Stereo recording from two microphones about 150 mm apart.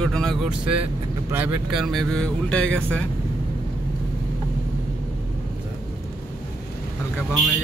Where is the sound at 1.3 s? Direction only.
10° right (ahead or behind); by 3.0 s 10° left (ahead or behind).